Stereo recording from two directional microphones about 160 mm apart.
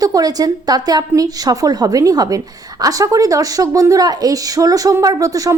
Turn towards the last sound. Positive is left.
turn(degrees=-20)  # may be behind; listen again after turning